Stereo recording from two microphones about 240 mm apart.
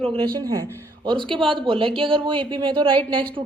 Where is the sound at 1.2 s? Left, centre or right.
Centre.